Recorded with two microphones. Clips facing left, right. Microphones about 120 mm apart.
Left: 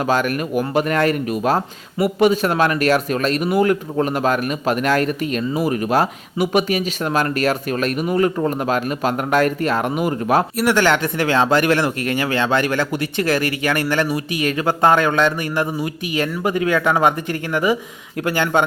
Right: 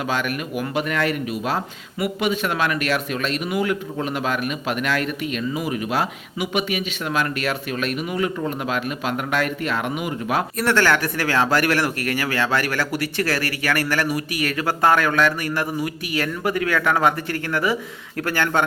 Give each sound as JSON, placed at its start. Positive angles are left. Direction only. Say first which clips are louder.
{"t": 0.0, "sound": "speech", "louder": "left 6 dB", "side_deg": 40}
{"t": 10.6, "sound": "speech", "louder": "left 3 dB", "side_deg": 15}